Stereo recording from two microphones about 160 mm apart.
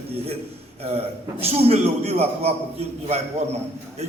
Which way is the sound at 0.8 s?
40° right (ahead or behind).